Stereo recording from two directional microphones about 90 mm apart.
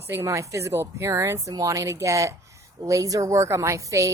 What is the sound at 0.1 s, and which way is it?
Speech, 30° right (ahead or behind).